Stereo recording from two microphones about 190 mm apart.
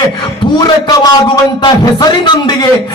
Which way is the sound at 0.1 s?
25° left (ahead or behind).